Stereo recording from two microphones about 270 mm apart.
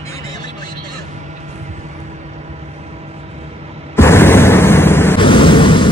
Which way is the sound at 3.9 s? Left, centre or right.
Centre.